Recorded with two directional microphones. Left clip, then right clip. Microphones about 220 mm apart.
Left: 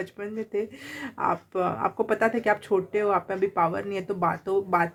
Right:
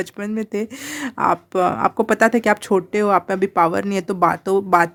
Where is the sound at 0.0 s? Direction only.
50° right (ahead or behind).